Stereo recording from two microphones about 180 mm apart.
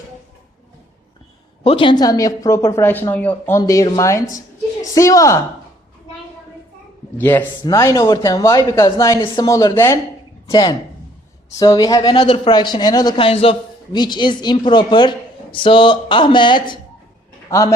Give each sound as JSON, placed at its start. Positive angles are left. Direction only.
{"t": 1.6, "sound": "a woman's voice", "side_deg": 30}
{"t": 7.2, "sound": "a woman's voice", "side_deg": 10}